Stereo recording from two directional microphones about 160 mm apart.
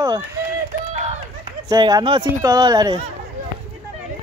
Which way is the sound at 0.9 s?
50° right (ahead or behind).